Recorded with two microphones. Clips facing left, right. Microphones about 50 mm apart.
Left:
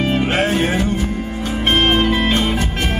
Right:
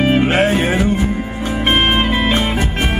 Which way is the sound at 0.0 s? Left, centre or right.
Centre.